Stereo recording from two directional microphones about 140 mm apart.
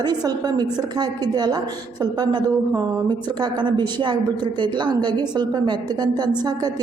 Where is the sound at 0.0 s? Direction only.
30° right (ahead or behind).